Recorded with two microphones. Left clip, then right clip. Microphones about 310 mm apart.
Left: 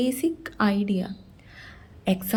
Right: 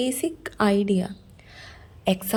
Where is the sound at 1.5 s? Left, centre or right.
Centre.